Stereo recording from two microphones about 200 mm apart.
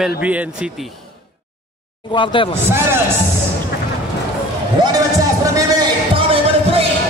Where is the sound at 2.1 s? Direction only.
25° left (ahead or behind).